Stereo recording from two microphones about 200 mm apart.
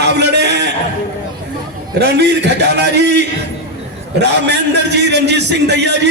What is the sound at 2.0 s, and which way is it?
Speech, 55° right (ahead or behind).